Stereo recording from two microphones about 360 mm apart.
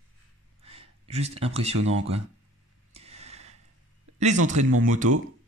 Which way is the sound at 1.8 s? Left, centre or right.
Centre.